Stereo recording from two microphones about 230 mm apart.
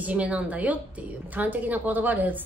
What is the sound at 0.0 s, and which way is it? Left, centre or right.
A woman's voice, centre.